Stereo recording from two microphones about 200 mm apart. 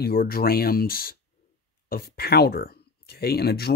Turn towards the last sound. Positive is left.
turn(degrees=55)  # may be behind; listen again after turning